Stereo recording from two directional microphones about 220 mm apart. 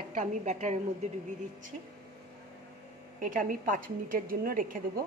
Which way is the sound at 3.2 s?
35° right (ahead or behind).